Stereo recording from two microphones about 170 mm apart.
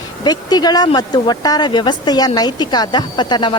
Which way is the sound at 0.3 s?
25° left (ahead or behind).